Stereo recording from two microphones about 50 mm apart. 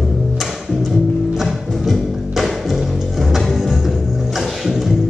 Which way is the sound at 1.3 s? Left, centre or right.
Centre.